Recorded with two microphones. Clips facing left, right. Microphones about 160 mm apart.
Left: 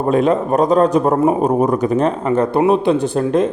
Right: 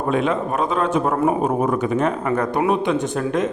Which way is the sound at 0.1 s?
40° left (ahead or behind).